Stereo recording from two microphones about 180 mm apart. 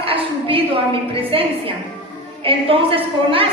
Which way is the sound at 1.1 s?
30° right (ahead or behind).